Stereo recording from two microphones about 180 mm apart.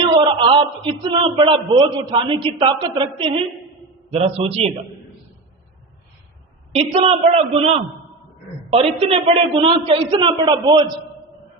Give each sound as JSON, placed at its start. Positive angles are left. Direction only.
{"t": 0.3, "sound": "a man's voice", "side_deg": -30}
{"t": 6.7, "sound": "a man's voice", "side_deg": -35}
{"t": 9.0, "sound": "a man's voice", "side_deg": -30}